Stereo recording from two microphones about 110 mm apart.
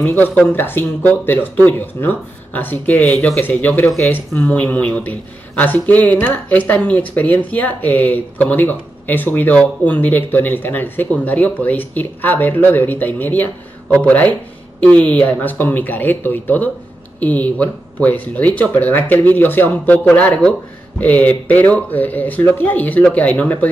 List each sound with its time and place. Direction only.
0.0 s speech: 15° left (ahead or behind)